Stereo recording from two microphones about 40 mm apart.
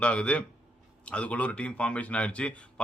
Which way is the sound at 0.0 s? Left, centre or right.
Left.